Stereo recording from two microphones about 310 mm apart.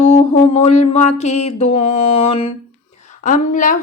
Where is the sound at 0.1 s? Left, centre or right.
Centre.